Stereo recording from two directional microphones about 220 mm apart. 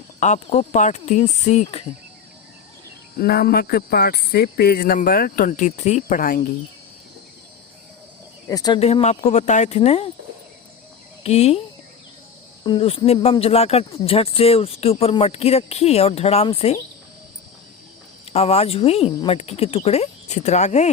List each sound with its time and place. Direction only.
0.2 s speech: 30° left (ahead or behind)
3.2 s speech: 45° left (ahead or behind)
8.4 s speech: 15° left (ahead or behind)
11.2 s speech: 30° left (ahead or behind)
12.6 s speech: 25° left (ahead or behind)
18.3 s speech: 30° left (ahead or behind)